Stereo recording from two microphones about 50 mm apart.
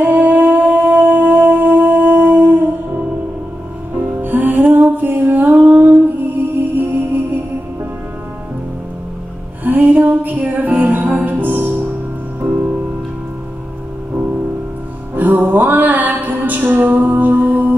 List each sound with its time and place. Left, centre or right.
0.0 s humming: right
2.3 s music: right
4.2 s music: right
9.7 s music: right
15.1 s music: right